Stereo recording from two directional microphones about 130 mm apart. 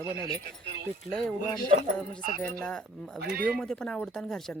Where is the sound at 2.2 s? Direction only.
90° right.